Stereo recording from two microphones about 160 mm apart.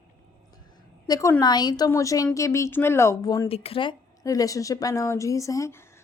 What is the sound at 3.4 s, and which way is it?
Speech, 35° left (ahead or behind).